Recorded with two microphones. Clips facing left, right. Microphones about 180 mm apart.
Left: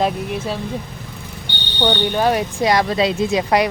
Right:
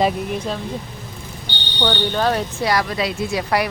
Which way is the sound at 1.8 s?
10° left (ahead or behind).